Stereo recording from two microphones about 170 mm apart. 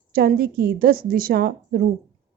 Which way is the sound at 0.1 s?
60° right (ahead or behind).